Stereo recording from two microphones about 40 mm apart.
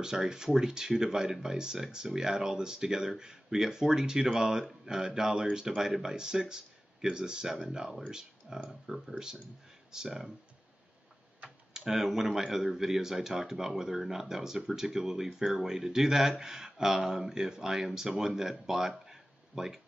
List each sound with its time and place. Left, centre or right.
0.0 s speech: centre
8.6 s speech: centre
11.4 s speech: centre